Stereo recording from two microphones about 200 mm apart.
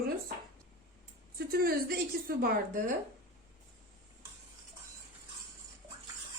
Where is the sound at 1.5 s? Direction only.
50° right (ahead or behind).